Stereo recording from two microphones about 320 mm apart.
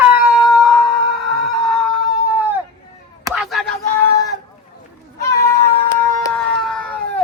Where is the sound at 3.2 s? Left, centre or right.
Centre.